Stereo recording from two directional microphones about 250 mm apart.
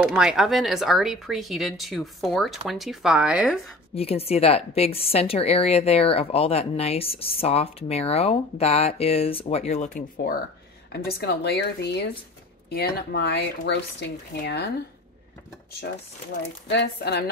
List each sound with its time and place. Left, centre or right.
0.0 s speech: centre
3.9 s speech: left
16.6 s speech: left